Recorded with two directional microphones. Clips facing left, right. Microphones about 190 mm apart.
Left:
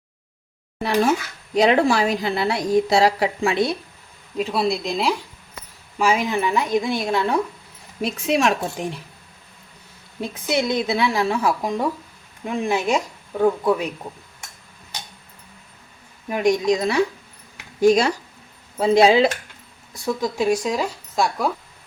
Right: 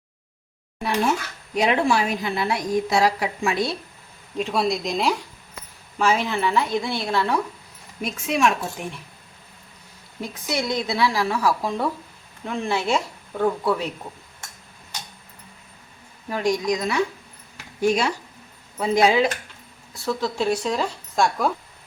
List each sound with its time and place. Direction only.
1.5 s a woman's voice: 35° left (ahead or behind)
4.4 s speech: centre (ahead or behind)
6.0 s speech: 10° left (ahead or behind)
8.0 s a woman's voice: 35° left (ahead or behind)
10.2 s speech: 25° left (ahead or behind)
16.3 s speech: 20° left (ahead or behind)
19.9 s speech: 15° left (ahead or behind)